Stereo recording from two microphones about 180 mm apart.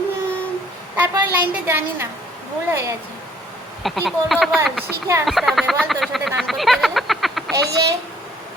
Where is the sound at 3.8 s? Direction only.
Centre (ahead or behind).